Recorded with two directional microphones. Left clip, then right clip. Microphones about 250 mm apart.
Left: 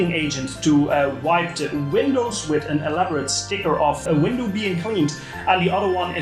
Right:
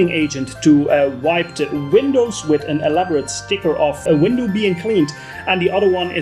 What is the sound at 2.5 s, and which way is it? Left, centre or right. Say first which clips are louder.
Speech: right 6 dB; right.